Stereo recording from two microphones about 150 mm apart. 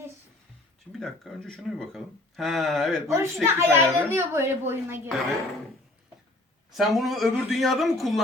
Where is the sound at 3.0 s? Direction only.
20° right (ahead or behind).